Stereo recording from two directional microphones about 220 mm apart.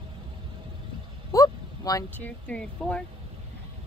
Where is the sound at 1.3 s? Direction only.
15° left (ahead or behind).